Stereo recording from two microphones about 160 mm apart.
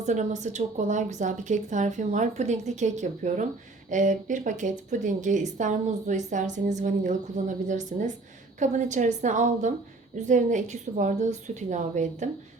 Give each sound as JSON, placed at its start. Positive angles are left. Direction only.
{"t": 0.0, "sound": "a woman's voice", "side_deg": -45}